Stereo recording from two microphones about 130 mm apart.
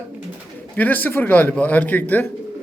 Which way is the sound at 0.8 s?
15° left (ahead or behind).